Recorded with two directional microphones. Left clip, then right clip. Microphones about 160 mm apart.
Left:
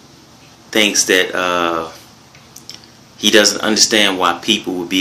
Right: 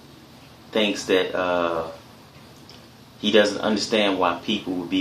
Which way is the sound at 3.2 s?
15° left (ahead or behind).